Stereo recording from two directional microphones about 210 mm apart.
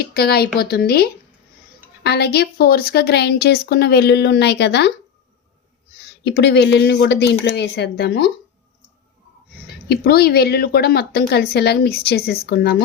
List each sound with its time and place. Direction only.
0.0 s a woman's voice: 50° left (ahead or behind)
6.2 s a woman's voice: 55° left (ahead or behind)
9.9 s a woman's voice: 50° left (ahead or behind)